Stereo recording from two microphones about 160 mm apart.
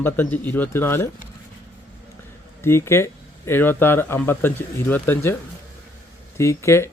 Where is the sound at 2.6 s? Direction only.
15° left (ahead or behind).